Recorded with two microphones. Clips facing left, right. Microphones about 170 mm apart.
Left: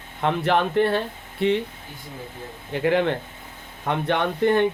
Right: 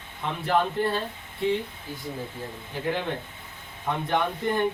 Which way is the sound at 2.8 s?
75° left (ahead or behind).